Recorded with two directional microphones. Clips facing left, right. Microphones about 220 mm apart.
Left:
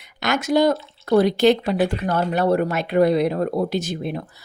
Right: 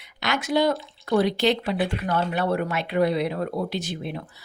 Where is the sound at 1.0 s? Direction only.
40° left (ahead or behind).